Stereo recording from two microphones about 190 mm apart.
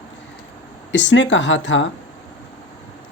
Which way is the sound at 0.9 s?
70° left (ahead or behind).